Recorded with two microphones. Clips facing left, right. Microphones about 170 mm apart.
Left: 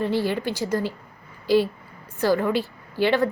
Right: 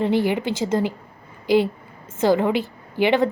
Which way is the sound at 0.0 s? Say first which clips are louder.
Right 3 dB; 20° right (ahead or behind).